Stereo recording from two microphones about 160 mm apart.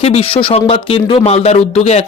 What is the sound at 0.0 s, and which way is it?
Speech, 35° left (ahead or behind).